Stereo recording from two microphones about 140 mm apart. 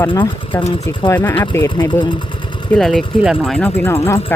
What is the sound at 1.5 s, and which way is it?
Speech, 30° left (ahead or behind).